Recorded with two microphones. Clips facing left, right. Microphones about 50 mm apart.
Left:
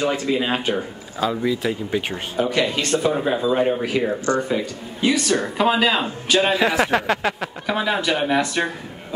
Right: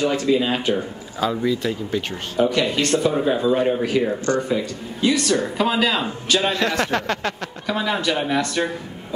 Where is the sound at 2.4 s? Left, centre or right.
Left.